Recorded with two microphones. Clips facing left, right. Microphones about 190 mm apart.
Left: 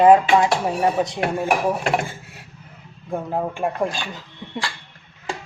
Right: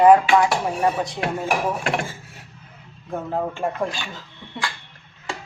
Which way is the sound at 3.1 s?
15° left (ahead or behind).